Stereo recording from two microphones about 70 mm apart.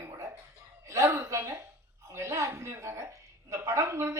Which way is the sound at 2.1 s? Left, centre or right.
Right.